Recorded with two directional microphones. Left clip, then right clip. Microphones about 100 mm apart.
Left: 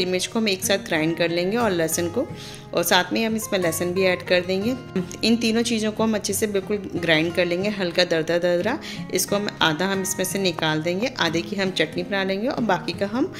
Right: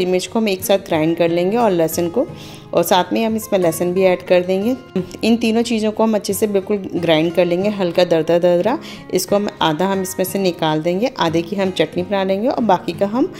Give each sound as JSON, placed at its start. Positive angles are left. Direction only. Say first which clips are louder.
{"t": 0.0, "sound": "a woman's voice", "louder": "right 5 dB", "side_deg": -40}